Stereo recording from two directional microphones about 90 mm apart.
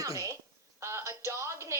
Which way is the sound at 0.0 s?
40° right (ahead or behind).